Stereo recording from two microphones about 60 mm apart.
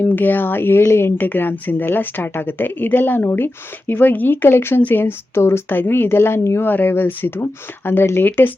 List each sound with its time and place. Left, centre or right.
0.0 s a woman's voice: left
0.8 s speech: left
1.2 s a woman's voice: left
5.7 s a woman's voice: left
6.7 s a woman's voice: left